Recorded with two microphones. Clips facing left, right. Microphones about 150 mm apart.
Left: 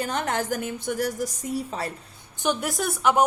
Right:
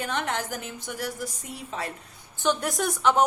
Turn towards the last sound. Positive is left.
turn(degrees=5)  # may be behind; listen again after turning